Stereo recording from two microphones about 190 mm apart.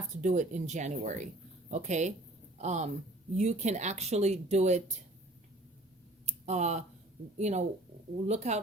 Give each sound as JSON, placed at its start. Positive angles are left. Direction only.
{"t": 0.2, "sound": "speech", "side_deg": -40}
{"t": 6.2, "sound": "a sound", "side_deg": -35}
{"t": 7.3, "sound": "speech", "side_deg": -35}